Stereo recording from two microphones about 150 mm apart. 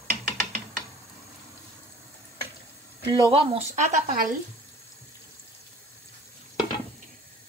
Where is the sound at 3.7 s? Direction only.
55° right (ahead or behind).